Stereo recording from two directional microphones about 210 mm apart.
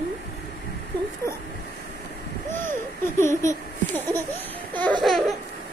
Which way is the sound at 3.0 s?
15° left (ahead or behind).